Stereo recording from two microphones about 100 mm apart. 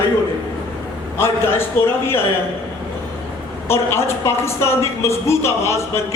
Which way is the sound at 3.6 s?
25° left (ahead or behind).